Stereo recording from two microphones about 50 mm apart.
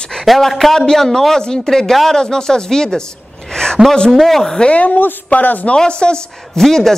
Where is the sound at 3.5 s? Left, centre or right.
Centre.